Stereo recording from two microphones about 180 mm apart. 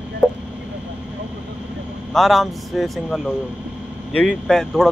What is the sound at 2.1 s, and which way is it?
Speech, centre (ahead or behind).